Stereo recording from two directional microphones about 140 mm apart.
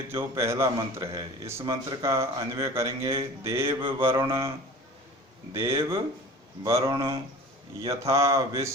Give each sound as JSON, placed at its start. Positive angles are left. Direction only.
{"t": 0.3, "sound": "speech", "side_deg": -20}
{"t": 5.5, "sound": "speech", "side_deg": -20}